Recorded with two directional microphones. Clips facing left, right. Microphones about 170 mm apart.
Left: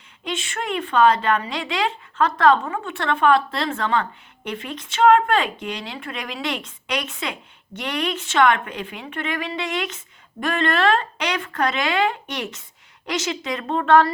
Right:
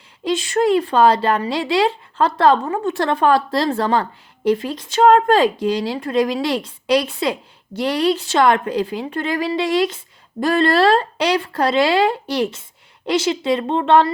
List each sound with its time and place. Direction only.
0.3 s a woman's voice: 35° right (ahead or behind)